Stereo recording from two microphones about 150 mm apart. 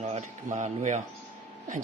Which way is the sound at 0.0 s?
50° right (ahead or behind).